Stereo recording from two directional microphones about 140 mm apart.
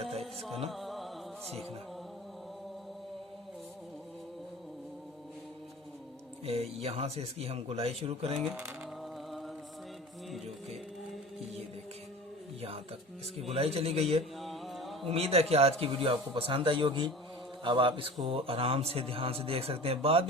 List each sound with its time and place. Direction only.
0.7 s music: centre (ahead or behind)
6.4 s speech: 45° right (ahead or behind)
8.4 s speech: 5° right (ahead or behind)
13.5 s speech: 45° right (ahead or behind)
14.3 s music: centre (ahead or behind)
15.0 s a man's voice: 45° right (ahead or behind)